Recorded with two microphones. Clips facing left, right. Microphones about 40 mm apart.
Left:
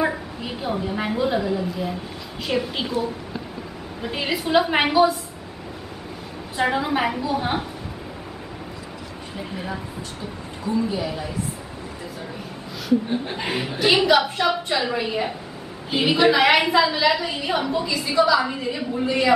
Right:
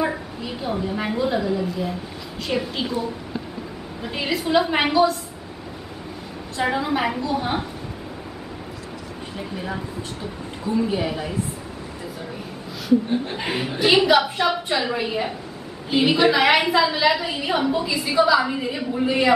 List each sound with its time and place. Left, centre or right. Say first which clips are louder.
0.4 s a woman's voice: even; centre
6.5 s a woman's voice: left 1 dB; centre
9.4 s a woman's voice: even; centre
10.9 s a woman's voice: right 2 dB; right
13.2 s a woman's voice: even; centre